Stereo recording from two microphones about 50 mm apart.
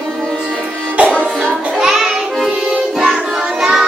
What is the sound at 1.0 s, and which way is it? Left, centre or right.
Music, right.